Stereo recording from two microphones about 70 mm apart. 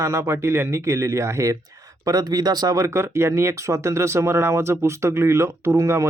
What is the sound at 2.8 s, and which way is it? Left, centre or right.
Speech, right.